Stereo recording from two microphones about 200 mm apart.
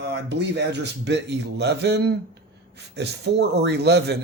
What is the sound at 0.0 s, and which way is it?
Speech, 60° right (ahead or behind).